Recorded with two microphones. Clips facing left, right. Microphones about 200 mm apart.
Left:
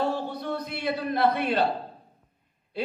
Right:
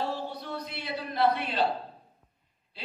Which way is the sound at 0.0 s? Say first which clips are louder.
Left 5 dB; 55° left (ahead or behind).